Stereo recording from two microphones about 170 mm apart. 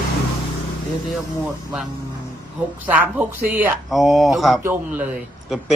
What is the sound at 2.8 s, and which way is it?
Speech, 10° right (ahead or behind).